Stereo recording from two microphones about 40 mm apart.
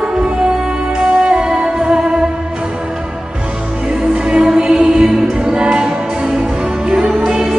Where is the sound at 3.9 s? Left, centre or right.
Right.